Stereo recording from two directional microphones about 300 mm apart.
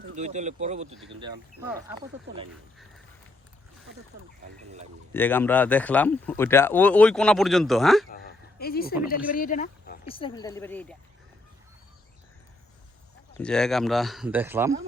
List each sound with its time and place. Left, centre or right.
0.2 s speech: right
5.1 s speech: centre
8.2 s a sound: left
9.0 s speech: left; by 10.9 s centre
13.3 s speech: centre